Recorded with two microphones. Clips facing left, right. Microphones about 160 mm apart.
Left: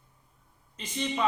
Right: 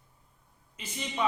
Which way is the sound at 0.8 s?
10° right (ahead or behind).